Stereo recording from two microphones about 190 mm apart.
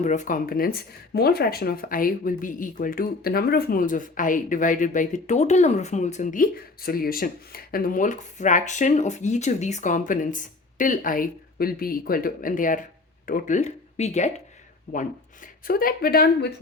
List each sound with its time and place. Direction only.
0.0 s speech: 40° left (ahead or behind); by 16.6 s 60° left (ahead or behind)